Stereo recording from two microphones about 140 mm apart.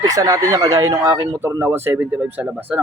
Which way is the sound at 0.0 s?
25° right (ahead or behind).